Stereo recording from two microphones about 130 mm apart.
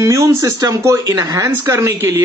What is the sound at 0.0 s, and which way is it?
A man's voice, 25° right (ahead or behind).